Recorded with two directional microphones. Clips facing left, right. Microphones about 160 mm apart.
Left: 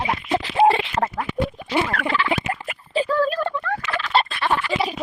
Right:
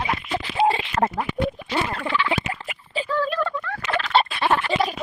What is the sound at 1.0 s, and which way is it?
Speech, 15° left (ahead or behind).